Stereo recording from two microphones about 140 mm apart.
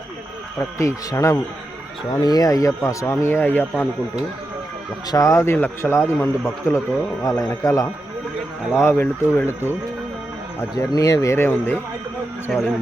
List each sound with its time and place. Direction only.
0.8 s speech: 20° left (ahead or behind)
5.1 s speech: 20° left (ahead or behind)
9.0 s speech: 15° left (ahead or behind)
10.6 s speech: 20° left (ahead or behind)
12.5 s speech: centre (ahead or behind)